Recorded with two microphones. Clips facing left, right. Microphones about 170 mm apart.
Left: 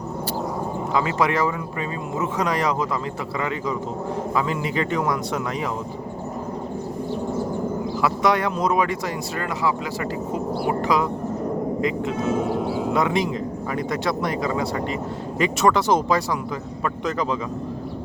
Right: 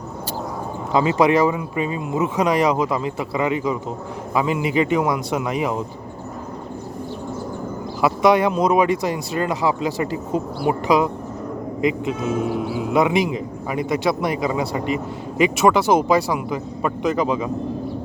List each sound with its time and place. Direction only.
0.9 s speech: 20° right (ahead or behind)
8.0 s speech: 10° right (ahead or behind)